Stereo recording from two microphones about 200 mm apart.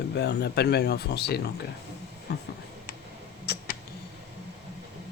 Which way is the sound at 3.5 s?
55° left (ahead or behind).